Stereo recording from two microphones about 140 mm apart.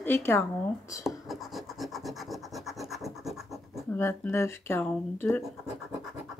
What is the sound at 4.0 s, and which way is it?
Speech, 15° left (ahead or behind).